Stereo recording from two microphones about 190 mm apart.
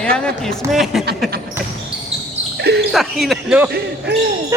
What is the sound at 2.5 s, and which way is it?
Basketball bounce, 60° right (ahead or behind).